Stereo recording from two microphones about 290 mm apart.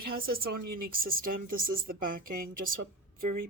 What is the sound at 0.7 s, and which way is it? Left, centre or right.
Speech, right.